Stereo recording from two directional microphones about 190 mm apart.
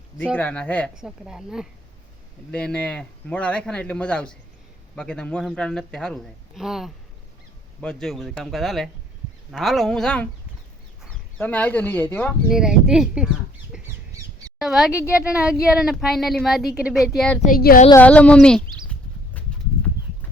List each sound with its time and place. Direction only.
0.3 s a man's voice: 5° left (ahead or behind)
12.5 s a man's voice: 5° right (ahead or behind)
13.7 s squawk: 5° right (ahead or behind)
14.1 s a sound: 15° right (ahead or behind)
14.6 s a man's voice: centre (ahead or behind)
17.4 s speech: 50° left (ahead or behind)
18.0 s speech: 5° left (ahead or behind)